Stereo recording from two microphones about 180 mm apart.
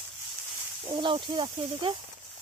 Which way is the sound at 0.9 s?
25° right (ahead or behind).